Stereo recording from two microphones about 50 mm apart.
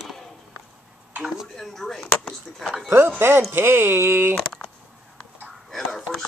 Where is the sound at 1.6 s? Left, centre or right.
Centre.